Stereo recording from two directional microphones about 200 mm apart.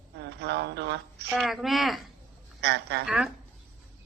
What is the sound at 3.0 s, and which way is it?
Speech, 5° right (ahead or behind).